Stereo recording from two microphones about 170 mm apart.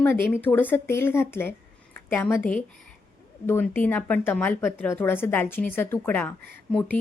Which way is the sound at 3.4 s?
15° left (ahead or behind).